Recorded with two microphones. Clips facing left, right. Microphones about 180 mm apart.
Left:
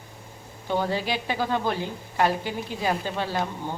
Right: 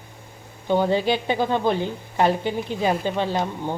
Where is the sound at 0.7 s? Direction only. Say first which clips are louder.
Right 6 dB; 20° right (ahead or behind).